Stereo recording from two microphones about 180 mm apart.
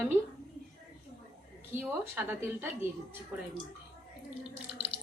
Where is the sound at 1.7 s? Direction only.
10° right (ahead or behind).